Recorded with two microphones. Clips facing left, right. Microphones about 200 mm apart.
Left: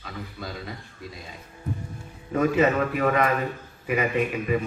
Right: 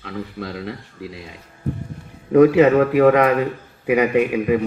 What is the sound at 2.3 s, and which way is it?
A man's voice, 65° right (ahead or behind).